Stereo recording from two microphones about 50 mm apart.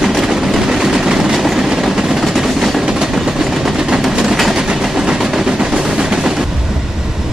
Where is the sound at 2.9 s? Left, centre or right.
Centre.